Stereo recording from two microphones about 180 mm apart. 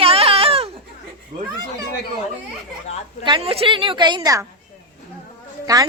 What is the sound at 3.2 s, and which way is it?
A woman's voice, 30° right (ahead or behind).